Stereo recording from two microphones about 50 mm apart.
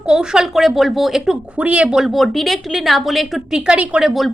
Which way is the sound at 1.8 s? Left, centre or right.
Centre.